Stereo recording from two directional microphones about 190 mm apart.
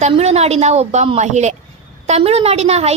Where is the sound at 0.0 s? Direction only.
35° right (ahead or behind).